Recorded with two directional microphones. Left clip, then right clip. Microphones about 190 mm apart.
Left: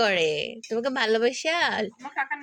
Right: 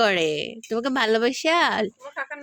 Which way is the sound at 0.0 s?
40° right (ahead or behind).